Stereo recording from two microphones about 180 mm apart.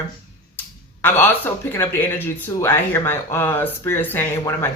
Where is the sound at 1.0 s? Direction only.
10° left (ahead or behind).